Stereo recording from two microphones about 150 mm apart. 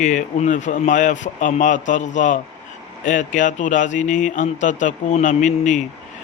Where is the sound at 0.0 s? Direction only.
55° left (ahead or behind).